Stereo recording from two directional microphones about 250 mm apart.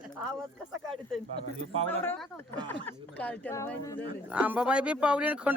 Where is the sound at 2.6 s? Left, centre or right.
Centre.